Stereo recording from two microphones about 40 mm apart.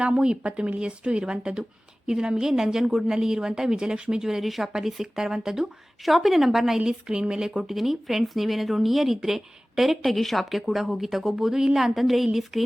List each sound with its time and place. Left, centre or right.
0.0 s a woman's voice: right
6.1 s speech: centre
6.7 s speech: right
7.8 s speech: centre